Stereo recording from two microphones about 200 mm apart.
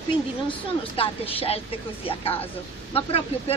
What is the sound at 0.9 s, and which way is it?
A woman's voice, 30° left (ahead or behind).